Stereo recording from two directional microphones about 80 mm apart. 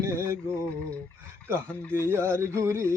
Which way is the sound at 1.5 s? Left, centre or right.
Right.